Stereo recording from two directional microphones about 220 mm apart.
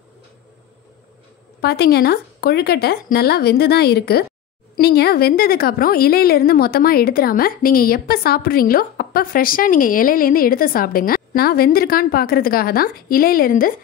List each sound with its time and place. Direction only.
1.6 s a woman's voice: 45° left (ahead or behind)